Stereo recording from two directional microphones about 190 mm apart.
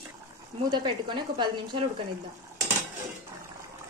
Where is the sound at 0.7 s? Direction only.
25° right (ahead or behind).